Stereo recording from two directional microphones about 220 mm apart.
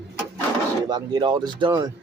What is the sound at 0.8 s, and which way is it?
Speech, 20° right (ahead or behind).